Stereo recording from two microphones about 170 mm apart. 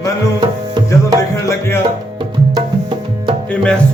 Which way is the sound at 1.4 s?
15° left (ahead or behind).